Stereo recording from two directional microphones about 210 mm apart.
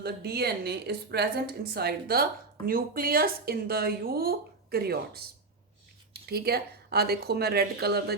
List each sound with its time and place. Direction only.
0.0 s a woman's voice: 50° right (ahead or behind)
6.2 s a woman's voice: 50° right (ahead or behind)